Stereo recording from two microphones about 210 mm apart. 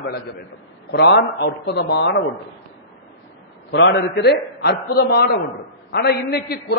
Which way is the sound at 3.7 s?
55° left (ahead or behind).